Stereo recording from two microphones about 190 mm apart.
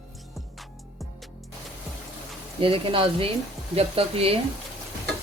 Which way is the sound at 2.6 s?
30° right (ahead or behind).